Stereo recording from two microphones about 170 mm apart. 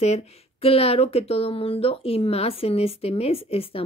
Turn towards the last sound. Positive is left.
turn(degrees=35)  # may be behind; listen again after turning